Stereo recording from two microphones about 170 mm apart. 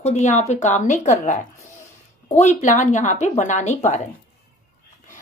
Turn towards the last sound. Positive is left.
turn(degrees=45)  # may be behind; listen again after turning